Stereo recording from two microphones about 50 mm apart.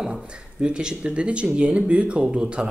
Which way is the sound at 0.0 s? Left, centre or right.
Centre.